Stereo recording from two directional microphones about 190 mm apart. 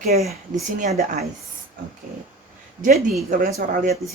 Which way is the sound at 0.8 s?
35° right (ahead or behind).